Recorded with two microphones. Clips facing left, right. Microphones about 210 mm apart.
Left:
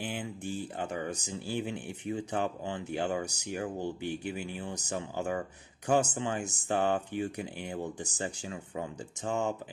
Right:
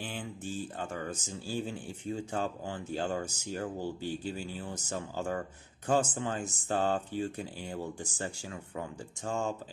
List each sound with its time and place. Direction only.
0.0 s speech: 15° left (ahead or behind)